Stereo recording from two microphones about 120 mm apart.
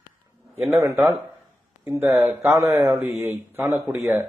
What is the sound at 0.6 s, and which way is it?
Speech, 25° right (ahead or behind).